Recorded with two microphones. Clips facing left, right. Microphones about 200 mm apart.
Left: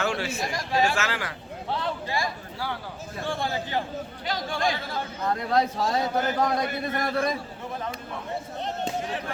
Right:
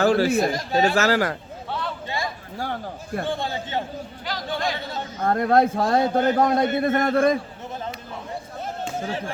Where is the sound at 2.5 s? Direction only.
45° right (ahead or behind).